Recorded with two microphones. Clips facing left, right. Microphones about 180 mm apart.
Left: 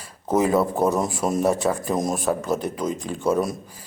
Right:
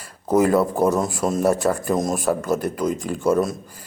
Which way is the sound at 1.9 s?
10° left (ahead or behind).